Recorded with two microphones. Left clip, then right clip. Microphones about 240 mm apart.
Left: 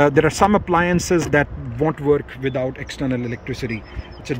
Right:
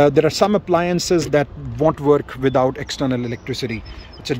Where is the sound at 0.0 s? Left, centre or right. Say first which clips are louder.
Right 1 dB; centre.